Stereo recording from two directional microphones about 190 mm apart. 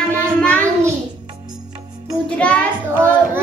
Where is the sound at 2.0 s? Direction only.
5° left (ahead or behind).